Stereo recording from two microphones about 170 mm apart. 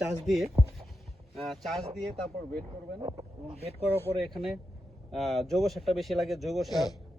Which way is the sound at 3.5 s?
35° right (ahead or behind).